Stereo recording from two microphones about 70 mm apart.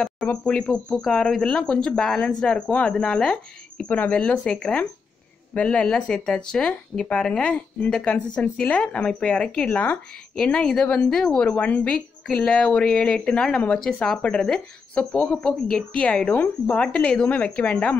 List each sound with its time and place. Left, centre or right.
0.3 s speech: centre